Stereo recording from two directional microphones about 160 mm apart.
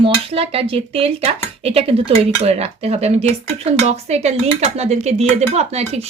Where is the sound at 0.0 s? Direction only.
35° right (ahead or behind).